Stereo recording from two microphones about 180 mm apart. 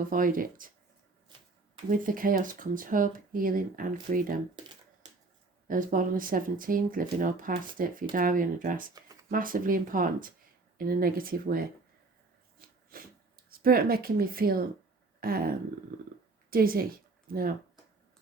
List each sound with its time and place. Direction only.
0.1 s speech: 50° right (ahead or behind)
1.9 s speech: 50° right (ahead or behind)
4.6 s speech: 25° right (ahead or behind)
5.6 s speech: 50° right (ahead or behind)
12.6 s a sound: 55° right (ahead or behind)
16.5 s a woman's voice: 55° right (ahead or behind)